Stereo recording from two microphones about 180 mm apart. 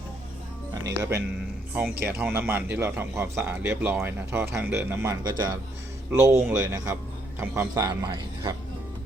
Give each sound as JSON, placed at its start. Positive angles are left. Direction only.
{"t": 0.7, "sound": "a man's voice", "side_deg": -15}